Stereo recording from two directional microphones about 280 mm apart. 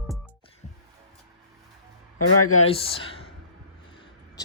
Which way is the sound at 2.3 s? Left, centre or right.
Left.